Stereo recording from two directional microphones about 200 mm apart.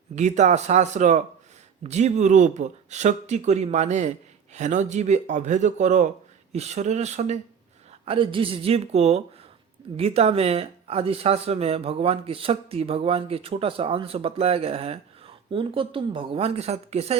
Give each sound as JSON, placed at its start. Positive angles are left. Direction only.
{"t": 0.2, "sound": "speech", "side_deg": -35}